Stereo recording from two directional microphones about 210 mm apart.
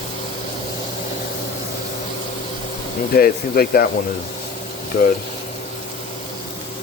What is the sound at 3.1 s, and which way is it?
Speech, 45° left (ahead or behind).